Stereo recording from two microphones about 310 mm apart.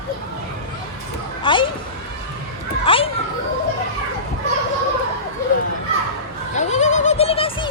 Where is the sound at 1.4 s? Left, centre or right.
Centre.